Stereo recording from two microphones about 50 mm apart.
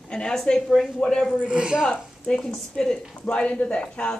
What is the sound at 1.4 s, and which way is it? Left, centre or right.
Speech, centre.